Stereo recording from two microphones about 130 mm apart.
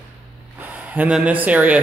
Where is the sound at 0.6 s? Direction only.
10° right (ahead or behind).